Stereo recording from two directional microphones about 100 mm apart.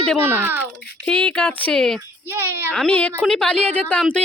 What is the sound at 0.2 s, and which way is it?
Speech, 20° right (ahead or behind).